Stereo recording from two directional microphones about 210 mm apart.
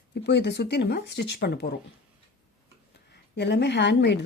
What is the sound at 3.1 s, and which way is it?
A woman's voice, 55° left (ahead or behind).